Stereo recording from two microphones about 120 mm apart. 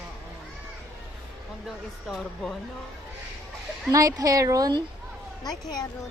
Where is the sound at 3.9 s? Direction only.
30° right (ahead or behind).